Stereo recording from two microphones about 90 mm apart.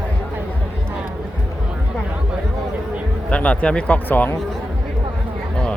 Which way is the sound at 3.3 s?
15° left (ahead or behind).